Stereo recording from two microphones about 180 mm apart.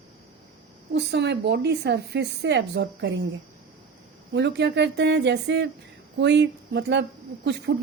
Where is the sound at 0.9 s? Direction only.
70° right (ahead or behind).